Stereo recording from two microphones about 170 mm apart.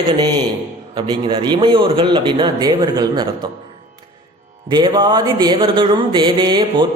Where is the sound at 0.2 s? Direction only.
25° right (ahead or behind).